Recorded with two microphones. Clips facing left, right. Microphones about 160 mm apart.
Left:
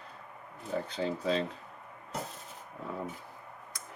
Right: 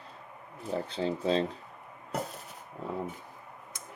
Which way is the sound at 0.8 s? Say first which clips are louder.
Right 3 dB; 30° right (ahead or behind).